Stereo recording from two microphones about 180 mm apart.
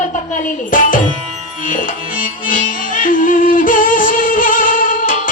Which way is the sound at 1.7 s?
50° left (ahead or behind).